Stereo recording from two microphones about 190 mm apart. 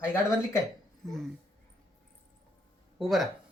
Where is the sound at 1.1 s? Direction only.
Centre (ahead or behind).